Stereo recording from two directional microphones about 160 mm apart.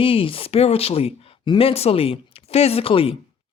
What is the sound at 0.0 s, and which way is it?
Speech, 35° left (ahead or behind).